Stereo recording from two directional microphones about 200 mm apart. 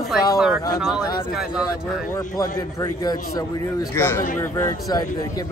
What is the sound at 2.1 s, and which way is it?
Speech, 15° left (ahead or behind).